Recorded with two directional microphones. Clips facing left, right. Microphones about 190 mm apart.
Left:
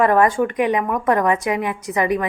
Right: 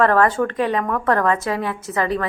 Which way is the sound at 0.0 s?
15° left (ahead or behind).